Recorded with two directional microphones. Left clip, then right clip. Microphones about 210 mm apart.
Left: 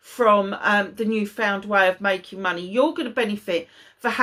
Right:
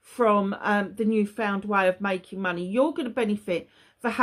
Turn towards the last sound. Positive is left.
turn(degrees=-40)  # may be behind; listen again after turning